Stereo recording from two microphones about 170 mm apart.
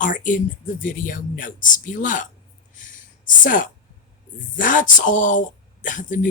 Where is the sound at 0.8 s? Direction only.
50° left (ahead or behind).